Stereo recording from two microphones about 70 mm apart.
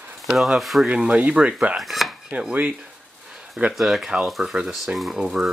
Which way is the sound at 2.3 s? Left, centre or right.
Centre.